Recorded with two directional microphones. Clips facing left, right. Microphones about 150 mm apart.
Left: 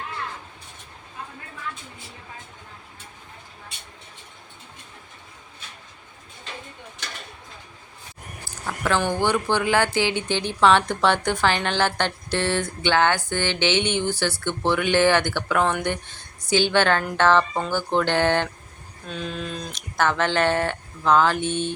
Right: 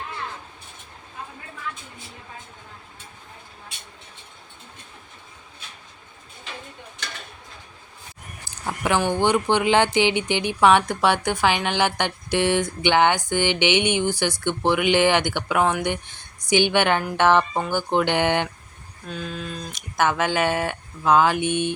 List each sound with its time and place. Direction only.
8.4 s speech: 20° right (ahead or behind)
19.0 s speech: 5° right (ahead or behind)